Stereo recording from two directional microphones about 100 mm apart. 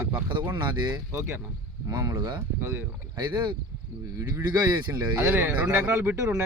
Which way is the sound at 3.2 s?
50° right (ahead or behind).